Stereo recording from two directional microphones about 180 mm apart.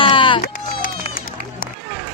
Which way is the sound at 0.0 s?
30° left (ahead or behind).